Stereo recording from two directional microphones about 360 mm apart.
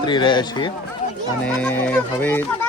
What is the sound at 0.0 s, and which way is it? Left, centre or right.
Speech, centre.